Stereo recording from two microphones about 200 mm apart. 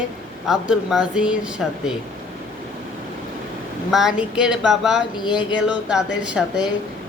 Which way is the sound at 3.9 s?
5° right (ahead or behind).